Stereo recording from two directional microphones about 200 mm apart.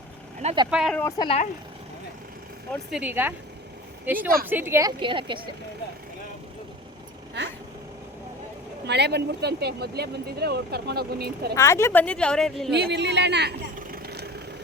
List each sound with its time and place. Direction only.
0.4 s a woman's voice: 20° right (ahead or behind)
0.7 s a woman's voice: 5° right (ahead or behind)
1.2 s speech: 30° left (ahead or behind)
2.9 s a woman's voice: 10° right (ahead or behind); by 5.5 s 25° right (ahead or behind)
8.9 s speech: 55° right (ahead or behind)
11.5 s a woman's voice: 15° left (ahead or behind)
12.7 s speech: 55° right (ahead or behind)